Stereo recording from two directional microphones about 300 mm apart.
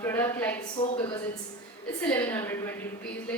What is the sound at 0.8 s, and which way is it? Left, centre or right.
Speech, left.